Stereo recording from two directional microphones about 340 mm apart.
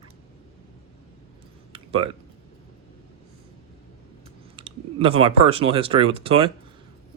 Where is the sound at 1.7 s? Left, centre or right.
Centre.